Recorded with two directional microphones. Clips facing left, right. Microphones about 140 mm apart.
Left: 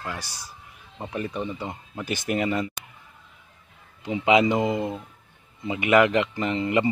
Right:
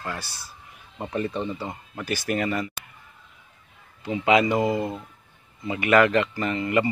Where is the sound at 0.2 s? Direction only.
15° left (ahead or behind).